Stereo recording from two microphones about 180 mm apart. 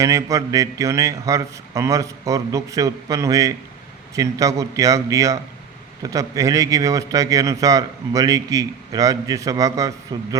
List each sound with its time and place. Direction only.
0.0 s a man's voice: 20° right (ahead or behind)